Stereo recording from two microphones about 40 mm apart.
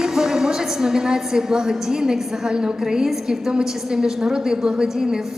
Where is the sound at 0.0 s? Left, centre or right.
Centre.